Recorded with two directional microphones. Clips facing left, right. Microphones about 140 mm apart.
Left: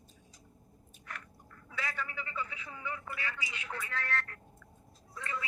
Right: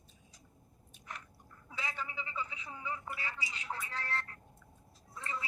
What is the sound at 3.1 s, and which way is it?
Telephone, 30° right (ahead or behind).